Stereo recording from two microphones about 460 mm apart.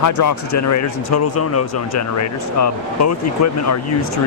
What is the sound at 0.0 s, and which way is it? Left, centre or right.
A man's voice, left.